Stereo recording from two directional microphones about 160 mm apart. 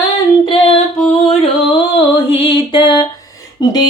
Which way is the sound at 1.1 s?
40° left (ahead or behind).